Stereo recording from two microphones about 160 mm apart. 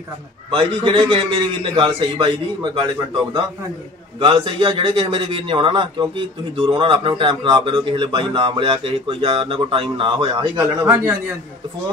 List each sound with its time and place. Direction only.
0.5 s speech: 30° right (ahead or behind)
4.2 s speech: 30° right (ahead or behind)